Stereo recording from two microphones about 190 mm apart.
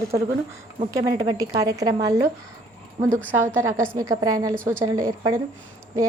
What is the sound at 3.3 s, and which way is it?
A woman's voice, 10° right (ahead or behind).